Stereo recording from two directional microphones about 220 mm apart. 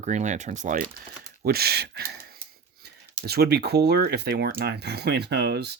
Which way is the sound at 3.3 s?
45° right (ahead or behind).